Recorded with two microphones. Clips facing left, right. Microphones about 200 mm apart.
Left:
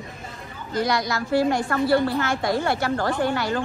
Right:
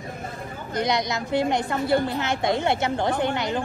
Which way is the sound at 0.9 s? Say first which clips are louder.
Left 1 dB; 20° right (ahead or behind).